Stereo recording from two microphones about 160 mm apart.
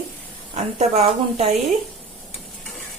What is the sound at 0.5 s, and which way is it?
A woman's voice, 45° right (ahead or behind).